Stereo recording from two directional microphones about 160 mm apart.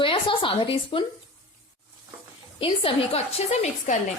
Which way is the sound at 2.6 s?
35° left (ahead or behind).